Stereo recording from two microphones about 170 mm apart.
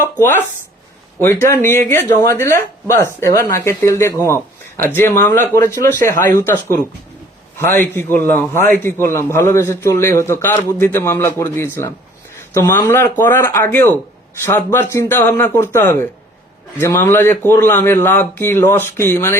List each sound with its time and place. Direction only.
0.0 s a man's voice: 15° left (ahead or behind)